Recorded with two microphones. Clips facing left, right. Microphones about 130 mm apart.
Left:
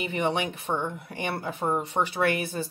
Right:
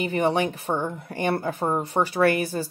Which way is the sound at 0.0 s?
40° right (ahead or behind).